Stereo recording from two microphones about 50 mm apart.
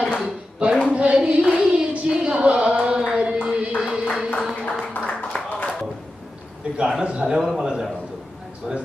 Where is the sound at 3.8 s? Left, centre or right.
Centre.